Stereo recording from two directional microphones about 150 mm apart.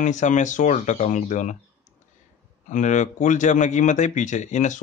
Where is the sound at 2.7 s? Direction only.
55° left (ahead or behind).